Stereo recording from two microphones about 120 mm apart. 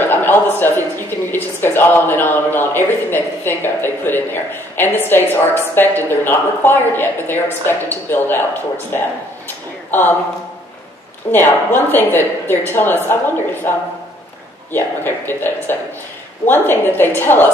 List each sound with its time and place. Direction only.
0.0 s a woman's voice: 15° left (ahead or behind)
9.8 s speech: 15° left (ahead or behind)
11.3 s a woman's voice: 15° left (ahead or behind)
14.7 s a woman's voice: 20° left (ahead or behind)